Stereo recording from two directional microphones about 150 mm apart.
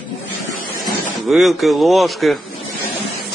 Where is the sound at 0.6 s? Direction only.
70° left (ahead or behind).